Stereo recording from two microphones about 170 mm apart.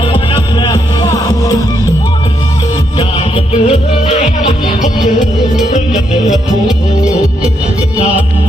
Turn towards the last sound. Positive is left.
turn(degrees=-5)  # may be behind; listen again after turning